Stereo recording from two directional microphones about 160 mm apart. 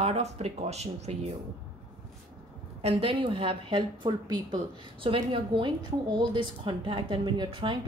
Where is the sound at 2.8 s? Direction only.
35° right (ahead or behind).